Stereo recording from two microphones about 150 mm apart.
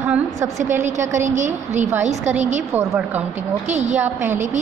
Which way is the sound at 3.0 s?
10° right (ahead or behind).